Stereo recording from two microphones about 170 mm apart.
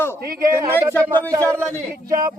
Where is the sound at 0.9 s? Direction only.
10° left (ahead or behind).